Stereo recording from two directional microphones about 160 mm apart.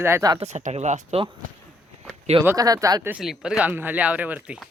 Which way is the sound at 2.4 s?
20° right (ahead or behind).